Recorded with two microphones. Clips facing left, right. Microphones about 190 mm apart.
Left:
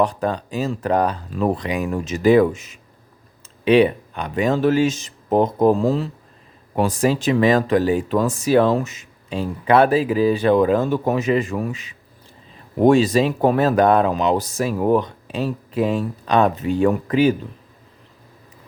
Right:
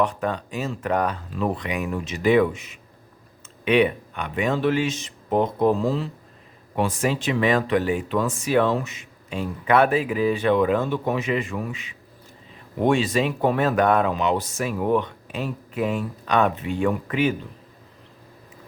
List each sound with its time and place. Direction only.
0.0 s speech: 35° left (ahead or behind)
3.6 s speech: 30° left (ahead or behind)